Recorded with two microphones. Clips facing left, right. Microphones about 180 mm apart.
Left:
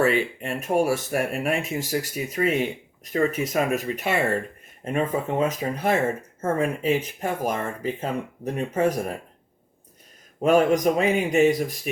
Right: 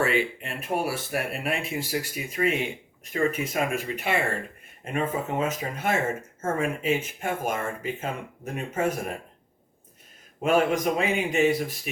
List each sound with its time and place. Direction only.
0.0 s speech: 40° left (ahead or behind)
10.4 s speech: 40° left (ahead or behind)